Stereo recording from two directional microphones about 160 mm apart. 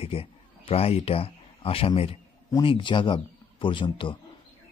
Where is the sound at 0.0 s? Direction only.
35° left (ahead or behind).